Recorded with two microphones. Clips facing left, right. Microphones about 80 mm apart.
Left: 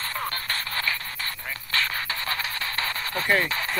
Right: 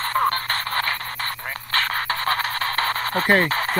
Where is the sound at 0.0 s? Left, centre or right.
Right.